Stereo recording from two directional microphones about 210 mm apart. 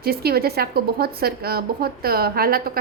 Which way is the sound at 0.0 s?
50° right (ahead or behind).